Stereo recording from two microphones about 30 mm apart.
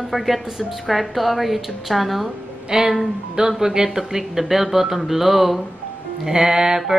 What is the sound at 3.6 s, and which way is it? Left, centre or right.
Speech, centre.